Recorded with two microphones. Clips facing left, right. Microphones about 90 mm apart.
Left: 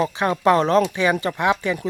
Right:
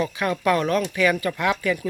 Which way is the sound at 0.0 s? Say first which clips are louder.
Left 4 dB; 30° left (ahead or behind).